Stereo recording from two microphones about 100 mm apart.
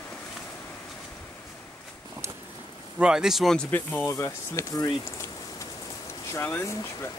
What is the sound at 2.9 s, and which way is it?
Speech, 5° right (ahead or behind).